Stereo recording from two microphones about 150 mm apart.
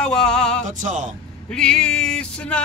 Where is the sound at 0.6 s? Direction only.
55° right (ahead or behind).